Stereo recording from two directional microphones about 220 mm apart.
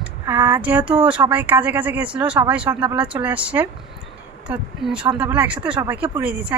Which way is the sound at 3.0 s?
5° right (ahead or behind).